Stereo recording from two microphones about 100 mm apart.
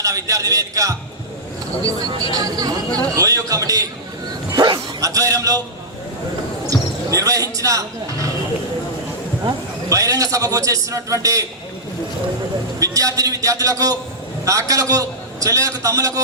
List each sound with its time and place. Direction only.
0.0 s a man's voice: 35° right (ahead or behind)
4.9 s a man's voice: 35° right (ahead or behind)
6.7 s a man's voice: 35° right (ahead or behind)
9.9 s a man's voice: 35° right (ahead or behind)
12.8 s a man's voice: 35° right (ahead or behind)